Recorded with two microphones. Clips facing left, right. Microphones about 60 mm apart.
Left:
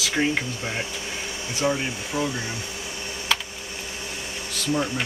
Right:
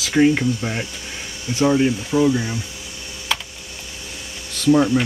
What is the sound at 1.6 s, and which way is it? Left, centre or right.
Speech, right.